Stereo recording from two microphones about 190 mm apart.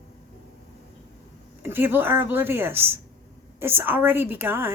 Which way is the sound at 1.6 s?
10° right (ahead or behind).